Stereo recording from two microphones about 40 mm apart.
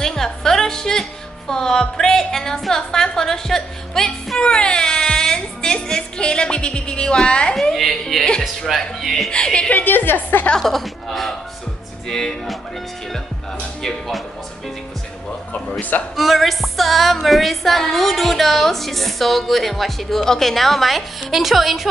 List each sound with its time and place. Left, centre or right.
0.0 s music: centre
1.5 s a woman's voice: centre
4.4 s speech: left
7.7 s music: centre
9.3 s speech: left
9.7 s a woman's voice: left
10.6 s music: centre
12.1 s a woman's voice: centre
13.8 s music: centre
16.2 s music: centre